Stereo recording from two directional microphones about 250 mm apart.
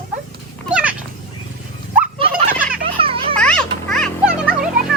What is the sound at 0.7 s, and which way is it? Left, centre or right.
Cat, centre.